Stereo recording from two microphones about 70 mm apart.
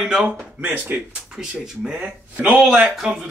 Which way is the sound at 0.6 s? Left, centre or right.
Right.